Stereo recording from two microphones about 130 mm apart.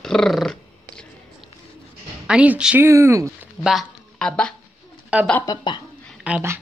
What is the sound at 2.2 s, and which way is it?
Speech, 10° right (ahead or behind).